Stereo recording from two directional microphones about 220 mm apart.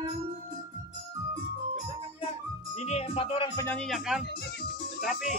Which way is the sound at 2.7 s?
30° left (ahead or behind).